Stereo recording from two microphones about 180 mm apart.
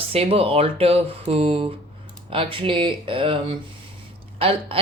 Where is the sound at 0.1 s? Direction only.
35° right (ahead or behind).